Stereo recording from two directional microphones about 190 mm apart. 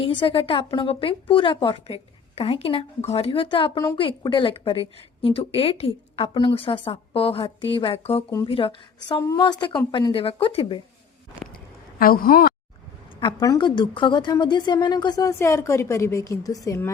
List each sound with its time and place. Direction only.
0.0 s a woman's voice: 25° left (ahead or behind)
11.9 s a woman's voice: 50° left (ahead or behind)
13.1 s a woman's voice: 20° left (ahead or behind)